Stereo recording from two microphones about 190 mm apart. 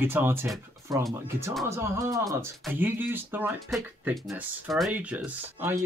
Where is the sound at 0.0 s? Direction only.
10° right (ahead or behind).